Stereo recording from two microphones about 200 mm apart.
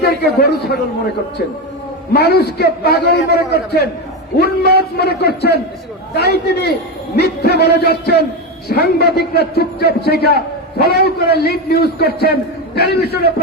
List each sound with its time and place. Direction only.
0.0 s a man's voice: 50° left (ahead or behind)
2.1 s a man's voice: 55° left (ahead or behind)